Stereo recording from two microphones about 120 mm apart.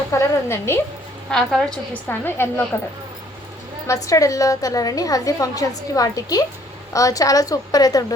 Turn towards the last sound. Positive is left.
turn(degrees=30)  # may be behind; listen again after turning